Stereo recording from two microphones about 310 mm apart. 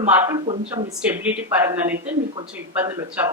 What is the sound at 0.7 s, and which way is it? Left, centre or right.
Speech, centre.